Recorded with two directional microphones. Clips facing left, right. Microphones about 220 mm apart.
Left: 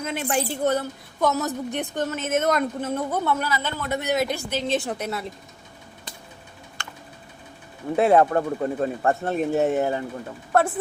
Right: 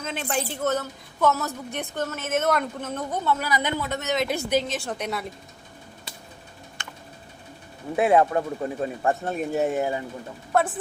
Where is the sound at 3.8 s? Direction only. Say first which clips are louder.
Left 2 dB; 10° left (ahead or behind).